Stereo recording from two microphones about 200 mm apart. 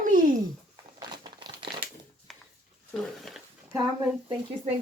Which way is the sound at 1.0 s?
20° right (ahead or behind).